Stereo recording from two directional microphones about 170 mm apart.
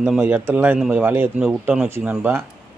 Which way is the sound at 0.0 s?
5° right (ahead or behind).